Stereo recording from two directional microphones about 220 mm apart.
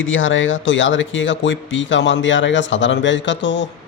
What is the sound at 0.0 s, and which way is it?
Speech, 60° left (ahead or behind).